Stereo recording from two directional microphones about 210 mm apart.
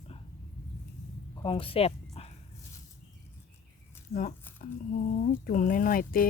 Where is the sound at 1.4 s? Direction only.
25° left (ahead or behind).